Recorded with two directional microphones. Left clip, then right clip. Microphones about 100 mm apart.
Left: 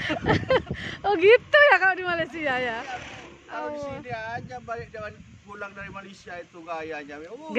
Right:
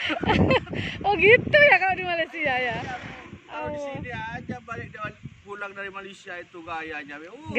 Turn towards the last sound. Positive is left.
turn(degrees=30)  # may be behind; listen again after turning